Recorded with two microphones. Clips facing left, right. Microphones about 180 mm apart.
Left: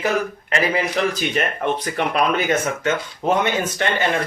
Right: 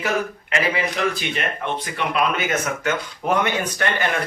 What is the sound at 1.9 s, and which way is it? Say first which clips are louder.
Speech: left 1 dB; 45° left (ahead or behind).